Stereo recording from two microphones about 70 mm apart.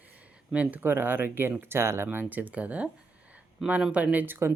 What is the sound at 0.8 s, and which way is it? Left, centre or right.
Speech, right.